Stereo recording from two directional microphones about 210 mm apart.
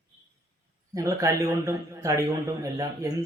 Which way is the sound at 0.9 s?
15° right (ahead or behind).